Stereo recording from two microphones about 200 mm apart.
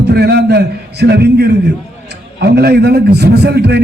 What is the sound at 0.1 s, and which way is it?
A man's voice, 55° right (ahead or behind).